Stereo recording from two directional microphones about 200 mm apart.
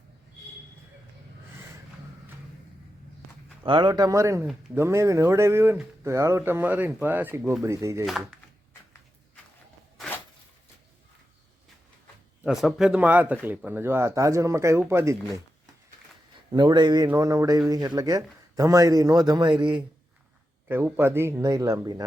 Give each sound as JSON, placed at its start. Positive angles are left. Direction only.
{"t": 3.6, "sound": "speech", "side_deg": -25}
{"t": 8.0, "sound": "speech", "side_deg": 0}
{"t": 12.4, "sound": "speech", "side_deg": 0}
{"t": 16.5, "sound": "a man's voice", "side_deg": -20}
{"t": 20.7, "sound": "speech", "side_deg": -10}